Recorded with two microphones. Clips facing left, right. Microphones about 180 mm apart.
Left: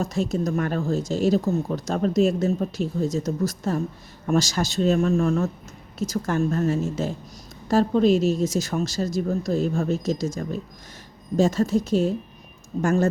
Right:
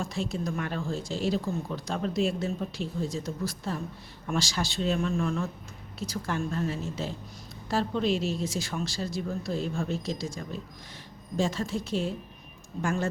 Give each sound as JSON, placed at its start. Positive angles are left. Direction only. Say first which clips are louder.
{"t": 0.0, "sound": "speech", "louder": "left 7 dB", "side_deg": 45}